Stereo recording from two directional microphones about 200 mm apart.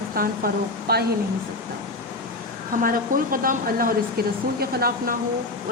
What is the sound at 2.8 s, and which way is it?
Speech, 45° right (ahead or behind).